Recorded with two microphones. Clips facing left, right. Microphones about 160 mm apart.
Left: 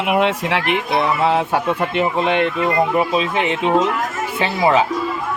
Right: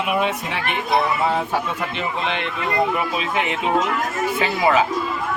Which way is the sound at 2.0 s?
50° left (ahead or behind).